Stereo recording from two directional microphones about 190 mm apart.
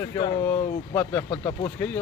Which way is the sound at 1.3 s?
20° left (ahead or behind).